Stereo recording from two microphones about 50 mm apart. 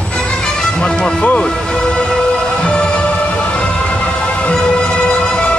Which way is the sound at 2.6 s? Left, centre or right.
Left.